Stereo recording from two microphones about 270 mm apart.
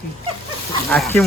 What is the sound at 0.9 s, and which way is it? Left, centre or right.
Speech, centre.